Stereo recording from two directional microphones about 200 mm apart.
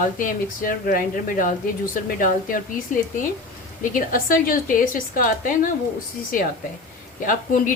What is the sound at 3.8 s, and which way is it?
Speech, 45° left (ahead or behind).